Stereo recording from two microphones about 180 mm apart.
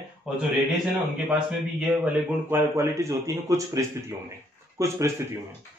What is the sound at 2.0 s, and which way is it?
Speech, 10° right (ahead or behind).